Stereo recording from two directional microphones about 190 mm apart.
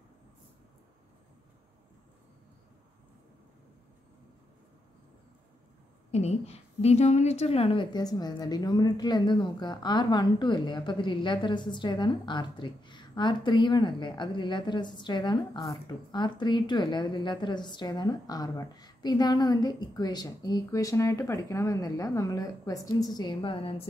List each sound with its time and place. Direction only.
6.1 s a woman's voice: 35° left (ahead or behind)